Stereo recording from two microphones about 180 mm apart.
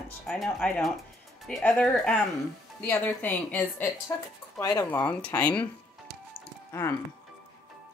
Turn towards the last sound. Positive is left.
turn(degrees=15)  # may be behind; listen again after turning